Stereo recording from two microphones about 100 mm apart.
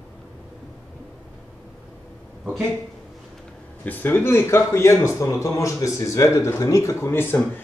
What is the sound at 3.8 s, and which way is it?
Speech, 20° left (ahead or behind).